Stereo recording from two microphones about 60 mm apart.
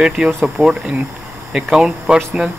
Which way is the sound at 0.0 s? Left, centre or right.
Centre.